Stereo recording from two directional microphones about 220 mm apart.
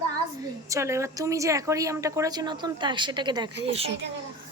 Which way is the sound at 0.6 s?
15° right (ahead or behind).